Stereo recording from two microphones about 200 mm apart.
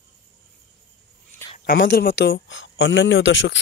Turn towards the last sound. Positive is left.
turn(degrees=70)  # may be behind; listen again after turning